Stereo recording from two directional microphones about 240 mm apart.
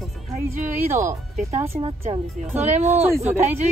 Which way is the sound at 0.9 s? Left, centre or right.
Centre.